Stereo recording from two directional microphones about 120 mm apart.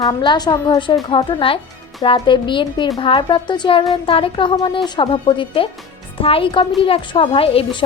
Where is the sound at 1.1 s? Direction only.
45° left (ahead or behind).